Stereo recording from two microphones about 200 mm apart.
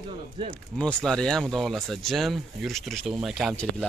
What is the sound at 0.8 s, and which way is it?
Speech, 5° left (ahead or behind).